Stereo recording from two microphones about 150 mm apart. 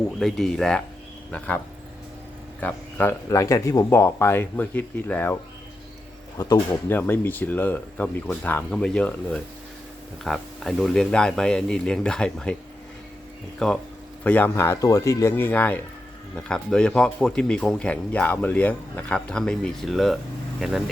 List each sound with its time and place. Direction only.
0.2 s speech: centre (ahead or behind)
2.6 s speech: 10° left (ahead or behind)
6.3 s speech: 25° left (ahead or behind); by 12.5 s 5° left (ahead or behind)
13.6 s speech: 5° left (ahead or behind)